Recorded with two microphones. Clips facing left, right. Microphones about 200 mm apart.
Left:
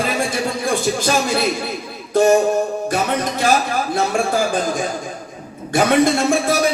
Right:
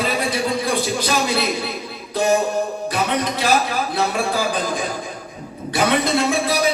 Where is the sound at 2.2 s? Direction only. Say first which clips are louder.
Left 5 dB; 50° left (ahead or behind).